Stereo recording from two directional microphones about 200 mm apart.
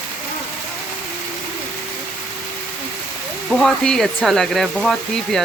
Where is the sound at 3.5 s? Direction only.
Centre (ahead or behind).